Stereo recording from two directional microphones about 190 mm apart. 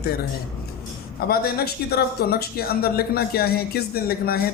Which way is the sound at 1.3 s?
55° left (ahead or behind).